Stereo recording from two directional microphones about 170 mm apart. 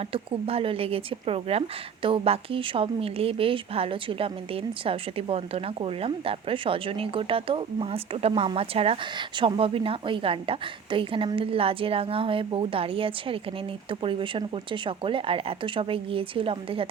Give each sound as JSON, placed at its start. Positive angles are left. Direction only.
{"t": 0.1, "sound": "a woman's voice", "side_deg": -35}